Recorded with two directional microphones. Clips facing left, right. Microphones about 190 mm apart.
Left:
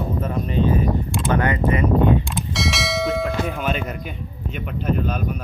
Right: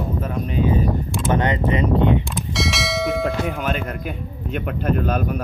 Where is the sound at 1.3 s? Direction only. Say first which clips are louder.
Even; 20° right (ahead or behind).